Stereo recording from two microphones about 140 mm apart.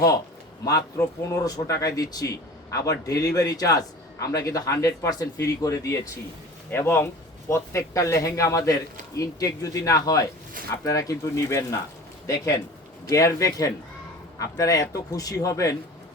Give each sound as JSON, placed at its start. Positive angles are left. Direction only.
{"t": 0.6, "sound": "speech", "side_deg": 25}